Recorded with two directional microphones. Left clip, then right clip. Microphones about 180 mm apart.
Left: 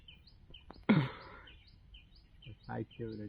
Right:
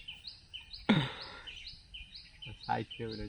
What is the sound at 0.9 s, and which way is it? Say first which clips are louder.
Music: right 1 dB; 20° right (ahead or behind).